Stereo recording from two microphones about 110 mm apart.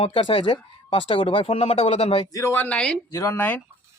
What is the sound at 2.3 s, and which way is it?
Speech, 25° left (ahead or behind).